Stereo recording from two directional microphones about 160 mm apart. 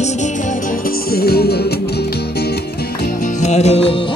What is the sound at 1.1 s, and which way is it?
Music, 75° left (ahead or behind).